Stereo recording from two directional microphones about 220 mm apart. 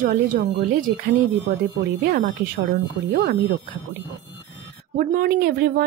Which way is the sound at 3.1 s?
50° right (ahead or behind).